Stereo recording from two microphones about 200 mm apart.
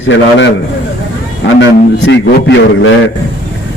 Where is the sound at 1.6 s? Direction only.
60° left (ahead or behind).